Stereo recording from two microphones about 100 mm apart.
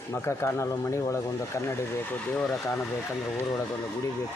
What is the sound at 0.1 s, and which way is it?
Speech, 25° left (ahead or behind).